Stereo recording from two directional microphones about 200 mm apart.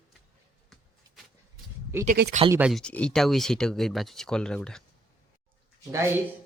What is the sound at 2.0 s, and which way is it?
Speech, 55° right (ahead or behind).